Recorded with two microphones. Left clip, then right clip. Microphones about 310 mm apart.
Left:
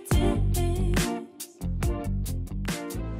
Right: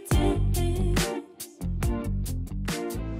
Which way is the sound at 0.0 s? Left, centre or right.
Centre.